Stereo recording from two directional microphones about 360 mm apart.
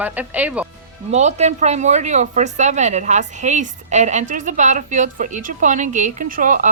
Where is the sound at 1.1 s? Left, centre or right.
Centre.